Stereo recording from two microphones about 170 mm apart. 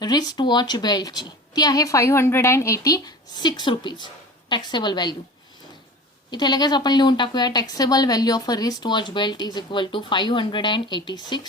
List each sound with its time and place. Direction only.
0.0 s a woman's voice: 25° left (ahead or behind)
6.3 s a woman's voice: 25° left (ahead or behind)